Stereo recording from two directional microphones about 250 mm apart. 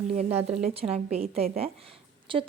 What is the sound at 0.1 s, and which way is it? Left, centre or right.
A woman's voice, right.